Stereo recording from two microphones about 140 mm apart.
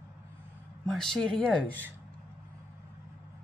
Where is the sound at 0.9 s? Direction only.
5° left (ahead or behind).